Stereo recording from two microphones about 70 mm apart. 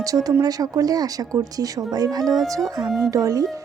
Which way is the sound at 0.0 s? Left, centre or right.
Right.